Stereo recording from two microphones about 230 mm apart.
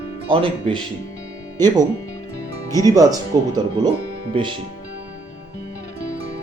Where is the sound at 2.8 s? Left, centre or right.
Centre.